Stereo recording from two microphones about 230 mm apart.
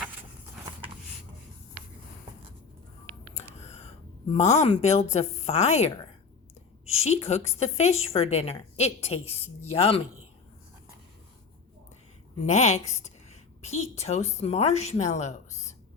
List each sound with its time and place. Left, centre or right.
3.3 s a sound: left
4.3 s a woman's voice: left
7.0 s a woman's voice: left
12.5 s speech: left
13.0 s a sound: left
14.3 s a woman's voice: left